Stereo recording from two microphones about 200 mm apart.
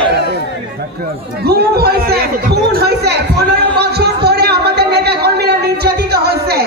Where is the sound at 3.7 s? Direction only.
55° right (ahead or behind).